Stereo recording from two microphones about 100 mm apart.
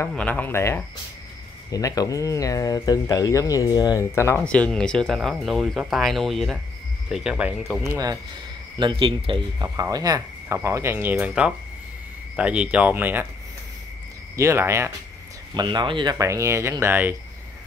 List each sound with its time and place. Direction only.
0.1 s speech: 15° left (ahead or behind)
1.7 s speech: 35° left (ahead or behind)
4.0 s speech: 25° left (ahead or behind)
4.5 s speech: 10° left (ahead or behind); by 7.8 s 5° right (ahead or behind)
8.9 s speech: 65° right (ahead or behind)
9.6 s speech: 40° right (ahead or behind); by 13.3 s 20° right (ahead or behind)
14.3 s speech: 30° right (ahead or behind)
15.5 s speech: 50° right (ahead or behind)
16.2 s speech: 30° right (ahead or behind)